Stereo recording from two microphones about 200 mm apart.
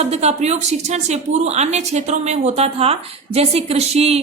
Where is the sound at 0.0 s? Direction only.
35° right (ahead or behind).